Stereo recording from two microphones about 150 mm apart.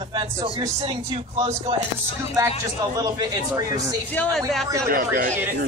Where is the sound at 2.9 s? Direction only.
25° right (ahead or behind).